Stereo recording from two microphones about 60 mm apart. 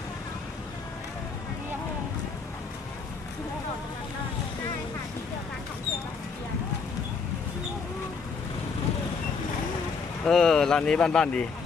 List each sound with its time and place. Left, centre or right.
10.2 s speech: centre